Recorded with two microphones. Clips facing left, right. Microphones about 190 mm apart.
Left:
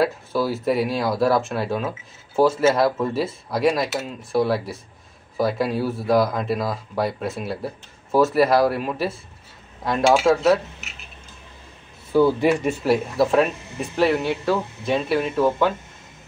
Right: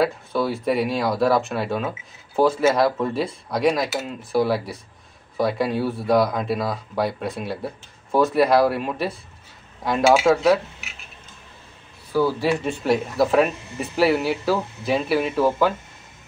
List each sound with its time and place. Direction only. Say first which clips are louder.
0.0 s speech: even; 5° left (ahead or behind)
12.1 s speech: left 3 dB; 20° left (ahead or behind)
12.6 s speech: left 1 dB; 5° left (ahead or behind)